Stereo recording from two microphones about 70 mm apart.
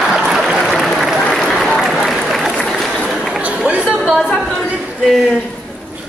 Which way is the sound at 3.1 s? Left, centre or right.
Centre.